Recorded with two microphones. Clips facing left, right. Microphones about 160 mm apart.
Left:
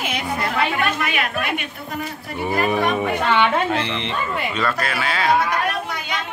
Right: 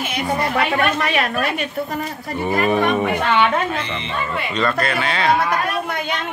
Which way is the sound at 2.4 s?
10° left (ahead or behind).